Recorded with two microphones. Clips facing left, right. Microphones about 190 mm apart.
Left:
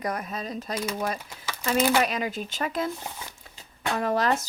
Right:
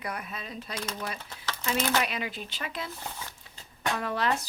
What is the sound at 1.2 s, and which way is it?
Speech, 10° left (ahead or behind).